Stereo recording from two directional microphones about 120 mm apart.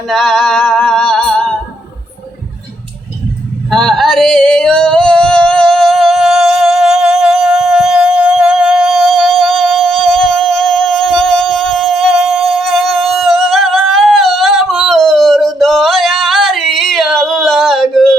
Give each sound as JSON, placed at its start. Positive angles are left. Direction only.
{"t": 0.1, "sound": "music", "side_deg": 5}
{"t": 3.7, "sound": "singing", "side_deg": 0}